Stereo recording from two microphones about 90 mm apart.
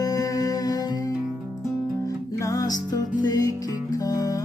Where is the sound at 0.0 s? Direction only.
40° left (ahead or behind).